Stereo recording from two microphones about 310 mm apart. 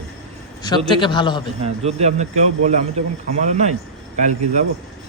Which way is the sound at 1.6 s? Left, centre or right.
Centre.